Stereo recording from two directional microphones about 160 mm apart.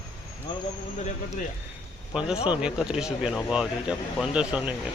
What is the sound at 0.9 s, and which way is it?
Speech, 45° left (ahead or behind).